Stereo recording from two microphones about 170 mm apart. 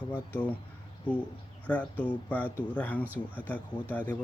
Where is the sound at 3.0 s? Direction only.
10° right (ahead or behind).